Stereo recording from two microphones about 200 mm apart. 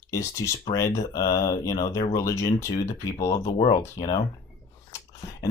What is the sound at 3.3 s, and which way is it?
Speech, 30° left (ahead or behind).